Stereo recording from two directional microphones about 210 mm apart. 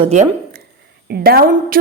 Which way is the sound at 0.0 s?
35° right (ahead or behind).